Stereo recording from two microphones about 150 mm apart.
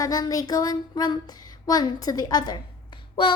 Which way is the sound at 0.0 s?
25° left (ahead or behind).